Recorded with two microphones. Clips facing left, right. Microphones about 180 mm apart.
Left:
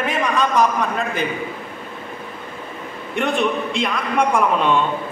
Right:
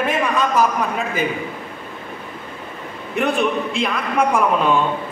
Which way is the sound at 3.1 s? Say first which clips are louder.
Right 1 dB; centre (ahead or behind).